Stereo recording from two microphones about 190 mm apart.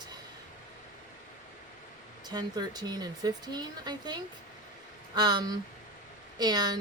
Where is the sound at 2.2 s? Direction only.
20° right (ahead or behind).